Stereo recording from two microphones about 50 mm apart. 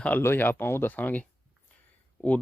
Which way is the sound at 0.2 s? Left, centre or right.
Left.